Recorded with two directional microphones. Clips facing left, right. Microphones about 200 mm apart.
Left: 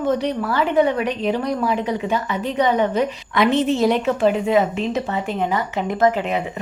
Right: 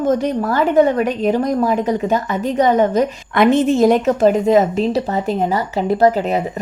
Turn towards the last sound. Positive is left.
turn(degrees=-40)  # may be behind; listen again after turning